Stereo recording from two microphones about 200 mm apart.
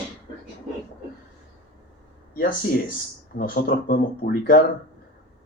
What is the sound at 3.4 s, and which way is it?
Speech, 45° left (ahead or behind).